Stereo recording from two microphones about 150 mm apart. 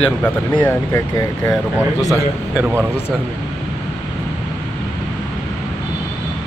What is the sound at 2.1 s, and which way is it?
Speech, 10° right (ahead or behind).